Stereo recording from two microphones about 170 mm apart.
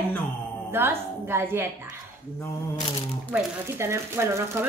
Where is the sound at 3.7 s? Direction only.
15° right (ahead or behind).